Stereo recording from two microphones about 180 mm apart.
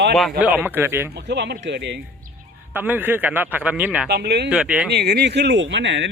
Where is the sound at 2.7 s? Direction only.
10° right (ahead or behind).